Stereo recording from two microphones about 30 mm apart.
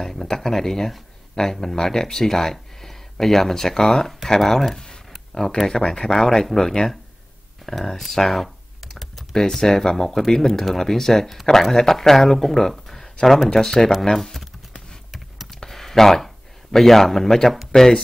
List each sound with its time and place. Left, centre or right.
0.0 s speech: centre
4.4 s a sound: centre
5.8 s speech: left
8.2 s speech: centre
15.6 s a sound: centre
16.7 s speech: centre